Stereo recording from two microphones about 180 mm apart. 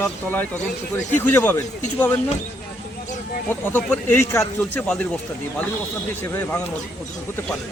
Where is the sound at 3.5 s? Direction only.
10° left (ahead or behind).